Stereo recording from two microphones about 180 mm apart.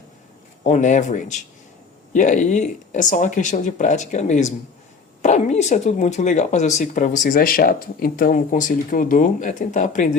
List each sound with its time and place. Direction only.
0.6 s speech: 40° left (ahead or behind)